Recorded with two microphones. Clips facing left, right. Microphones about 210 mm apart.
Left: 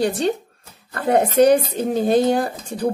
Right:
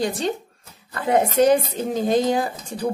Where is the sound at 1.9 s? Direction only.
60° left (ahead or behind).